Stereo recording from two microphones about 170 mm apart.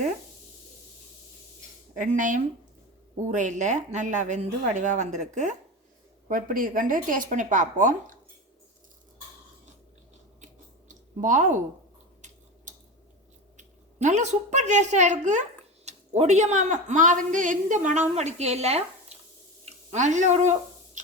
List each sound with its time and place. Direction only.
2.0 s speech: 50° right (ahead or behind)
10.4 s chewing: 45° right (ahead or behind)
13.6 s a woman's voice: 45° right (ahead or behind)
19.6 s a sound: 45° right (ahead or behind)